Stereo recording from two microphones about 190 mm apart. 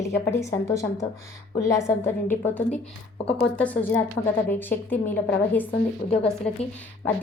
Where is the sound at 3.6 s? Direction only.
10° left (ahead or behind).